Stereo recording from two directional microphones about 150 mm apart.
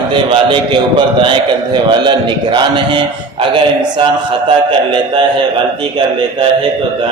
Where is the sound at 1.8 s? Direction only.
30° right (ahead or behind).